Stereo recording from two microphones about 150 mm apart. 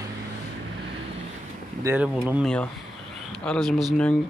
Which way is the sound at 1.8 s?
15° right (ahead or behind).